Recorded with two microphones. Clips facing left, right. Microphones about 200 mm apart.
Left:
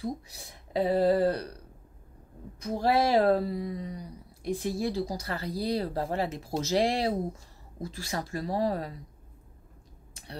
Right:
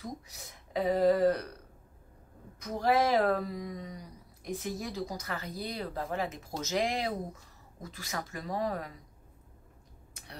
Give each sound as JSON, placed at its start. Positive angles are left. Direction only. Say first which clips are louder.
{"t": 0.0, "sound": "speech", "louder": "left 7 dB", "side_deg": 30}
{"t": 2.6, "sound": "speech", "louder": "left 2 dB", "side_deg": 30}